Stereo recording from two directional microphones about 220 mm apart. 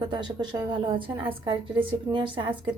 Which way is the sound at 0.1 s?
20° right (ahead or behind).